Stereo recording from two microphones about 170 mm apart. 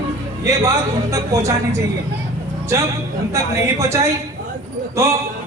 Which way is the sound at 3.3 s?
15° right (ahead or behind).